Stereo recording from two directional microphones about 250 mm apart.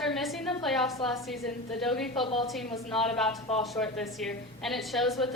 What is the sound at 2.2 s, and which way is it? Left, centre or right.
Speech, left.